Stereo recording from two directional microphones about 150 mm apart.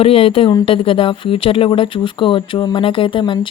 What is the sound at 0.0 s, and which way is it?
Speech, 40° left (ahead or behind).